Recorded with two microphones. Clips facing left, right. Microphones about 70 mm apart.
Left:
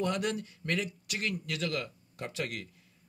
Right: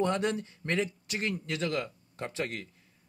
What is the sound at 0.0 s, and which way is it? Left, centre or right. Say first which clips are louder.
Speech: right 3 dB; right.